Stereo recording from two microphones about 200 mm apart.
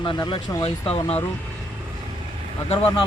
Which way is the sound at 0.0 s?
20° left (ahead or behind).